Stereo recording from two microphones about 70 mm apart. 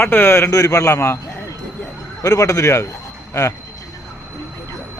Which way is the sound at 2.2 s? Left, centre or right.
Left.